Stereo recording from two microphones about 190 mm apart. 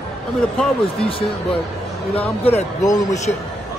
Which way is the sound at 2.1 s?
30° left (ahead or behind).